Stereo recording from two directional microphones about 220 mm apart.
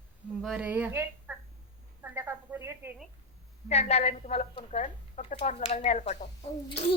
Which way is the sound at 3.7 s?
30° left (ahead or behind).